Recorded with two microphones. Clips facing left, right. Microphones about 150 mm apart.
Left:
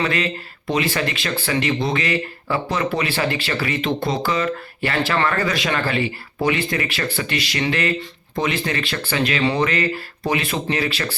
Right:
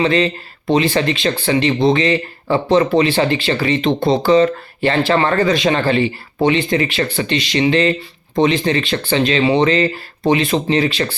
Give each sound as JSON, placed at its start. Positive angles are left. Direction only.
{"t": 0.0, "sound": "speech", "side_deg": -25}